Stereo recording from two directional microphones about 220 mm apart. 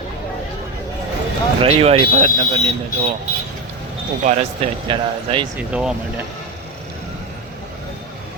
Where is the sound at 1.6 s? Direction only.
25° right (ahead or behind).